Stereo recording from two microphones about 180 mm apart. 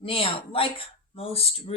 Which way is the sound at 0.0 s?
30° left (ahead or behind).